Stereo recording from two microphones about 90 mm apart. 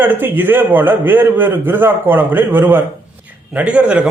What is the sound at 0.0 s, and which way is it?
A man's voice, 25° right (ahead or behind).